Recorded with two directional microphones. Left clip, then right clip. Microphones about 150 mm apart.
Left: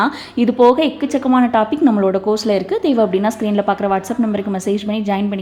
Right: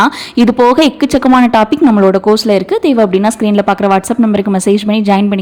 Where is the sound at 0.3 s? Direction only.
45° right (ahead or behind).